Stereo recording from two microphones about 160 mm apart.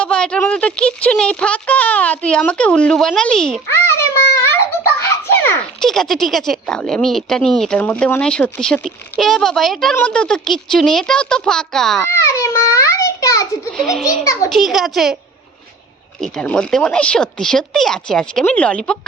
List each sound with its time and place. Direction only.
0.0 s speech: 5° left (ahead or behind)
3.7 s a sound: 15° left (ahead or behind)
5.8 s speech: centre (ahead or behind)
12.0 s a child's voice: 15° left (ahead or behind)
13.7 s speech: centre (ahead or behind)
16.2 s speech: 5° left (ahead or behind)